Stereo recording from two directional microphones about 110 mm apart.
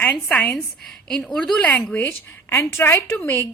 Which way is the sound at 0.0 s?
15° left (ahead or behind).